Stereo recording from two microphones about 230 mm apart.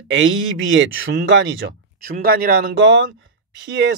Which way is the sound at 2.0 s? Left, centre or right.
Right.